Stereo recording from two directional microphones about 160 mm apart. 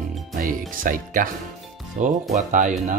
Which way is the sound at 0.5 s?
60° right (ahead or behind).